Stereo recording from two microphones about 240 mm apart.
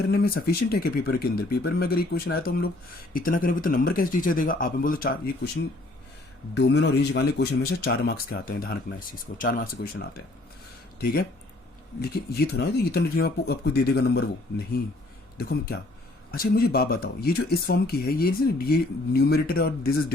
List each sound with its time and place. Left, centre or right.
0.1 s speech: left
6.8 s speech: left
12.0 s speech: left
15.4 s speech: left